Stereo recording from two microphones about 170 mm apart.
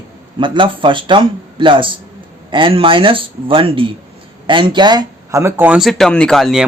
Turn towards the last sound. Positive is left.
turn(degrees=0)  # may be behind; listen again after turning